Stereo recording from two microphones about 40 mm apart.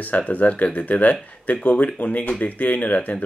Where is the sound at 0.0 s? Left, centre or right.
Left.